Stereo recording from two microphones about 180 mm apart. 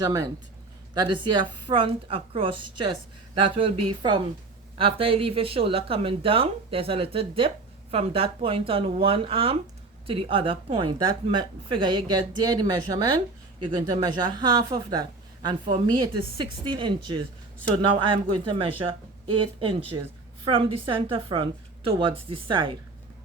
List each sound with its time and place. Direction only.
0.0 s a woman's voice: 20° right (ahead or behind)